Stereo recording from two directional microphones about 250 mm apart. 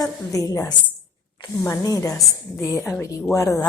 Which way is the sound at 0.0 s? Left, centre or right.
Centre.